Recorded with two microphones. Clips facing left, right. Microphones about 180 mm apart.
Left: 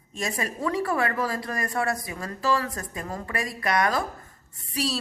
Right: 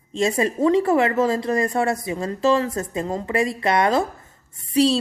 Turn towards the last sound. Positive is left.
turn(degrees=-25)  # may be behind; listen again after turning